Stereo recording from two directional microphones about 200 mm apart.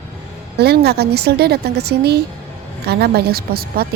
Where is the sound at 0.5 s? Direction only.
55° right (ahead or behind).